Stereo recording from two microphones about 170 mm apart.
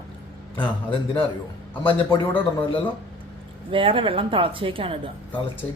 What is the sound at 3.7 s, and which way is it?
A woman's voice, 30° right (ahead or behind).